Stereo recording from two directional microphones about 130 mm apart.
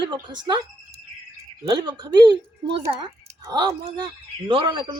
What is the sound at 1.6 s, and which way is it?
Speech, 35° right (ahead or behind).